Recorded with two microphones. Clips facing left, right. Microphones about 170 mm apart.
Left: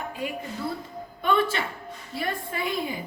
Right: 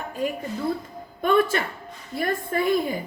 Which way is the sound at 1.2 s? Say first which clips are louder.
Right 4 dB; 45° right (ahead or behind).